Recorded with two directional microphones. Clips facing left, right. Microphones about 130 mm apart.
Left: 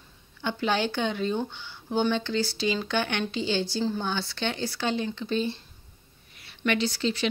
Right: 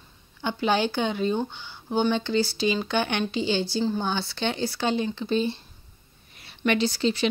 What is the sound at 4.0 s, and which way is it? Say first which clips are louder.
Speech: right 2 dB; 20° right (ahead or behind).